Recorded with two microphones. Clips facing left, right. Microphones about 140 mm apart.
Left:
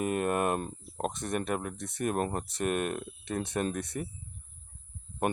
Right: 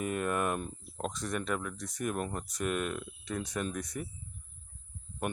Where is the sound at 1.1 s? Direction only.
55° left (ahead or behind).